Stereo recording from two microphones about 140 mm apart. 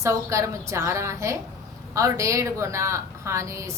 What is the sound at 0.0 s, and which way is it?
A woman's voice, 20° right (ahead or behind).